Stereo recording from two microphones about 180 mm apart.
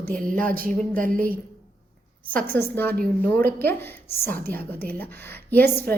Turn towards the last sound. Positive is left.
turn(degrees=10)  # may be behind; listen again after turning